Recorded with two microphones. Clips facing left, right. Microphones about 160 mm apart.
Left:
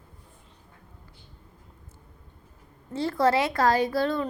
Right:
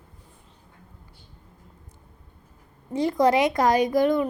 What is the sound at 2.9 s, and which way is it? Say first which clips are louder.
A child's voice: right 3 dB; 15° right (ahead or behind).